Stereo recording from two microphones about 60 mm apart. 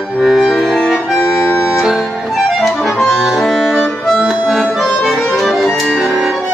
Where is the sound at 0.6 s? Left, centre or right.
Centre.